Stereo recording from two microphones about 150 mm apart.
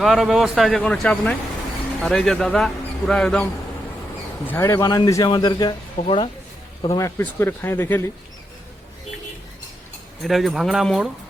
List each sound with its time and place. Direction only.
0.0 s speech: centre (ahead or behind)
4.4 s speech: 20° left (ahead or behind)
6.0 s speech: 40° left (ahead or behind)
6.9 s speech: 20° left (ahead or behind)
10.2 s speech: centre (ahead or behind)